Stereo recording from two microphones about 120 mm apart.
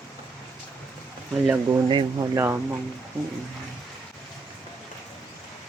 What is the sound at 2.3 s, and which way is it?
Speech, 20° right (ahead or behind).